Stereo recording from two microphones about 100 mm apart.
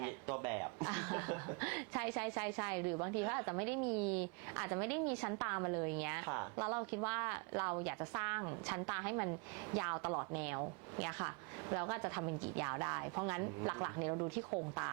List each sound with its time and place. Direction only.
0.0 s chuckle: 20° right (ahead or behind)
5.3 s a woman's voice: 25° right (ahead or behind)
10.3 s a woman's voice: 20° right (ahead or behind)